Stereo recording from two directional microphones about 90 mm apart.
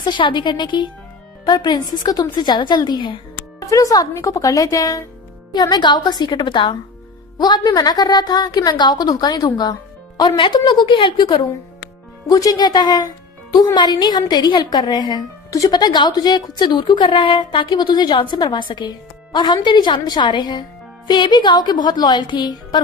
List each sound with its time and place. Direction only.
0.0 s a woman's voice: 60° left (ahead or behind)
3.7 s a woman's voice: 40° left (ahead or behind)
5.5 s a woman's voice: 55° left (ahead or behind)
12.3 s a woman's voice: 50° left (ahead or behind); by 17.7 s 70° left (ahead or behind)
17.8 s a woman's voice: 60° left (ahead or behind)